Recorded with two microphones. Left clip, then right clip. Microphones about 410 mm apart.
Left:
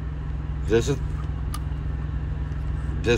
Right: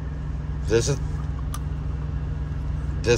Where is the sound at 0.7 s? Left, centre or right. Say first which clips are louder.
Even; centre.